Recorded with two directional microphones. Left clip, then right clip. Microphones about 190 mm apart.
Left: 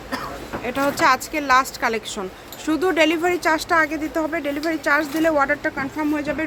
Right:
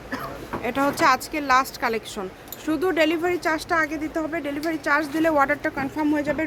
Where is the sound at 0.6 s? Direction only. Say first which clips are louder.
Left 2 dB; 10° right (ahead or behind).